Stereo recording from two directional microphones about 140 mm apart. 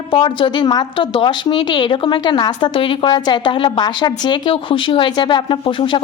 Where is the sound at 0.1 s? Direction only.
35° left (ahead or behind).